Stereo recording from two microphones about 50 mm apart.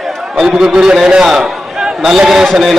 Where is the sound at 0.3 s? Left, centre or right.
Centre.